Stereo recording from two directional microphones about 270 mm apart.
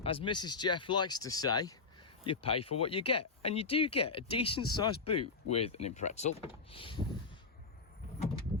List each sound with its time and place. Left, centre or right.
0.0 s speech: centre